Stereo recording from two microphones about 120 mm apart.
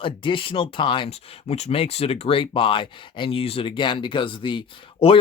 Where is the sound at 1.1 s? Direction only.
55° left (ahead or behind).